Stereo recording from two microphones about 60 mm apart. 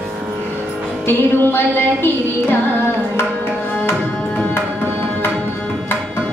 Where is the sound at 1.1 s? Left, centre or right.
Left.